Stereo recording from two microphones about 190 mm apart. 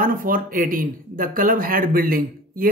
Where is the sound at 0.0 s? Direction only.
50° right (ahead or behind).